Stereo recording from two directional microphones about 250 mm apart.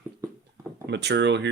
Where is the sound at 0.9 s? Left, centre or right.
Right.